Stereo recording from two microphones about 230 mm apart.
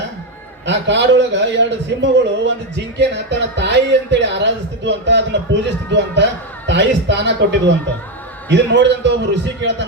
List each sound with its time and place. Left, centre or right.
0.6 s a man's voice: right